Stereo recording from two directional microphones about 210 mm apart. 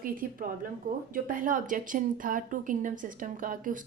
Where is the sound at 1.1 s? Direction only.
40° right (ahead or behind).